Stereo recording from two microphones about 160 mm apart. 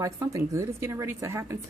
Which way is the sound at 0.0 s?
20° right (ahead or behind).